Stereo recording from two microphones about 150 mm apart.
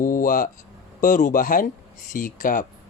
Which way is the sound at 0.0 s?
65° left (ahead or behind).